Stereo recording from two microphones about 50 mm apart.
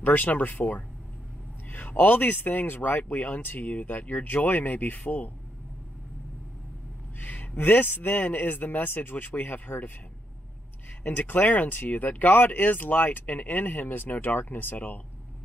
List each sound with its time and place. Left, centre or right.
0.0 s speech: left
7.2 s speech: left
11.1 s speech: left